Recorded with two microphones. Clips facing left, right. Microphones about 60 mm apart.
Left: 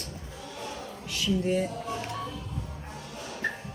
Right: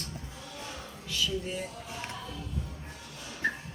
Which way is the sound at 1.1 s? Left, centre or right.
Left.